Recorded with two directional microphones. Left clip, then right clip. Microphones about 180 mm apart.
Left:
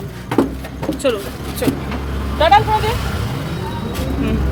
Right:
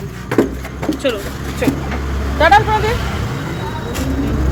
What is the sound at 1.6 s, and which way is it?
Vehicle, 10° left (ahead or behind).